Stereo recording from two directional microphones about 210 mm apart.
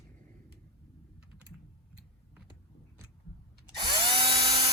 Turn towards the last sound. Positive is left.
turn(degrees=-30)  # may be behind; listen again after turning